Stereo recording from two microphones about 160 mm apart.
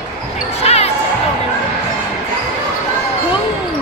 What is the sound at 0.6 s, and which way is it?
Basketball bounce, 40° left (ahead or behind).